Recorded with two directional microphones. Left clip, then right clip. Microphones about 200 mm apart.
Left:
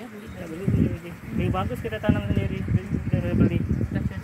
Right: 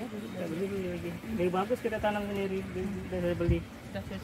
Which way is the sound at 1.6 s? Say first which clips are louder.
Left 1 dB; 35° left (ahead or behind).